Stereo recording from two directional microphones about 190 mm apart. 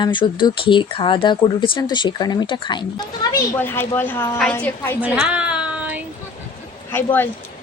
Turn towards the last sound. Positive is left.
turn(degrees=10)  # may be behind; listen again after turning